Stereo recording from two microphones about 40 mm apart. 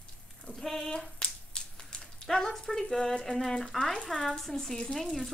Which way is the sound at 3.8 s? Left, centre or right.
Left.